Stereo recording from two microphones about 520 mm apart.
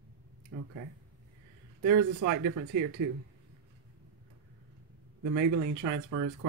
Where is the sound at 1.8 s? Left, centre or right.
Right.